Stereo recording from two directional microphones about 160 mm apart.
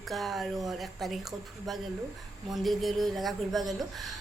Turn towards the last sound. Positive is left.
turn(degrees=0)  # may be behind; listen again after turning